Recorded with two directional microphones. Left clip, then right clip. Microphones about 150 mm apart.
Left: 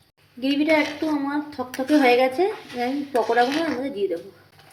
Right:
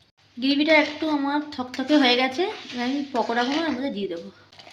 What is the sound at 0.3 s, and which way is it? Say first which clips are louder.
Speech: right 1 dB; 80° right.